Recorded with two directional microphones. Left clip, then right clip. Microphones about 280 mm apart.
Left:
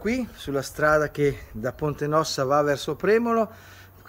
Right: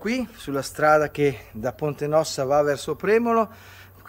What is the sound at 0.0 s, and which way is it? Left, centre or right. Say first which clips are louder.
Speech: even; centre.